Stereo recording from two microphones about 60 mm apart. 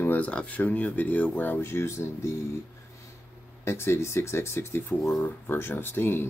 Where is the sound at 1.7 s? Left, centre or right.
Left.